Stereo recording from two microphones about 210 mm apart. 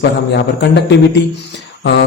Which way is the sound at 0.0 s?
55° left (ahead or behind).